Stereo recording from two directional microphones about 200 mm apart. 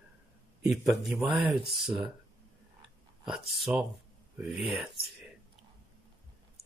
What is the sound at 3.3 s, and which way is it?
A man's voice, centre (ahead or behind).